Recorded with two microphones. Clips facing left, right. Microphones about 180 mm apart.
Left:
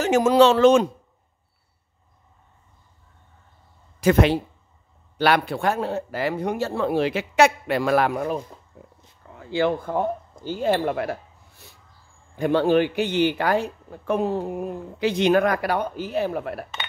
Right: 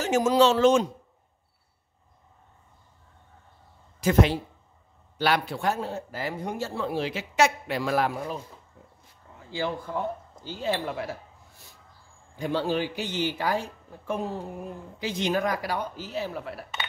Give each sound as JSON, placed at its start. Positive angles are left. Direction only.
{"t": 0.0, "sound": "a man's voice", "side_deg": 65}
{"t": 4.0, "sound": "a man's voice", "side_deg": 65}
{"t": 9.4, "sound": "a man's voice", "side_deg": 65}